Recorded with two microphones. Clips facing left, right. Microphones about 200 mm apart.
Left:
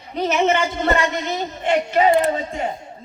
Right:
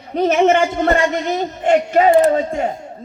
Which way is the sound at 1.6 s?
45° right (ahead or behind).